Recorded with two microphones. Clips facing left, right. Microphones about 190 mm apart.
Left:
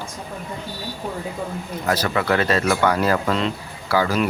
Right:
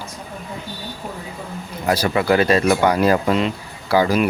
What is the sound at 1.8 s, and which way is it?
Speech, 10° right (ahead or behind).